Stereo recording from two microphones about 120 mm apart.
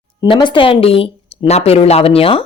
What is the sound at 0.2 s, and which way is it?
A woman's voice, 35° left (ahead or behind).